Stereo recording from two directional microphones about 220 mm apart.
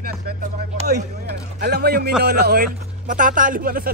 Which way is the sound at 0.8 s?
45° right (ahead or behind).